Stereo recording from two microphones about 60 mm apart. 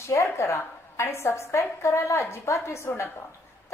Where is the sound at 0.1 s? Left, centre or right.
Left.